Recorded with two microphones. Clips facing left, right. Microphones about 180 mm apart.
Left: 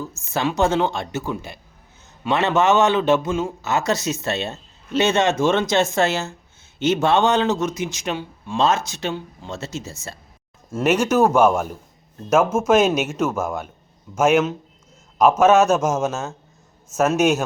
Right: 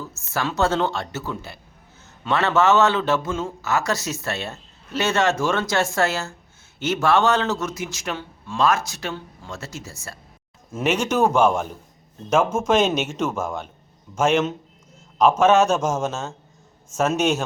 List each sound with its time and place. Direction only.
0.3 s a man's voice: 15° left (ahead or behind)
10.8 s a man's voice: 5° left (ahead or behind)